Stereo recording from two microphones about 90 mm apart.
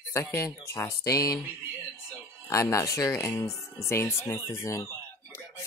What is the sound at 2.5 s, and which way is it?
Speech, 35° left (ahead or behind).